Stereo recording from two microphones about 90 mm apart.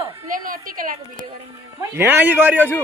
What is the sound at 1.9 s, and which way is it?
Speech, 20° right (ahead or behind).